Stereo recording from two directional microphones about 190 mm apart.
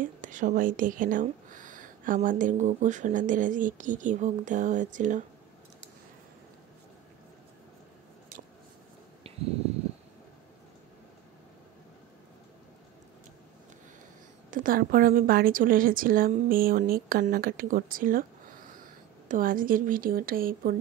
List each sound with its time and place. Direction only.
0.0 s a woman's voice: 45° right (ahead or behind)
14.5 s a woman's voice: 45° right (ahead or behind)